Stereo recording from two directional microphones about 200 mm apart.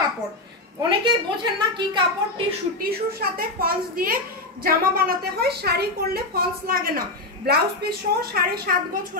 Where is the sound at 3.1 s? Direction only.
50° right (ahead or behind).